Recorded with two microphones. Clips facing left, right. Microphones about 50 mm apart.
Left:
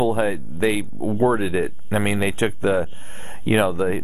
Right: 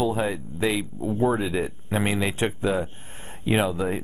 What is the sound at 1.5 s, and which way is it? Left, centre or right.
Speech, left.